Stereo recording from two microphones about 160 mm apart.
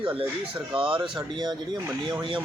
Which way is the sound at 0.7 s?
30° right (ahead or behind).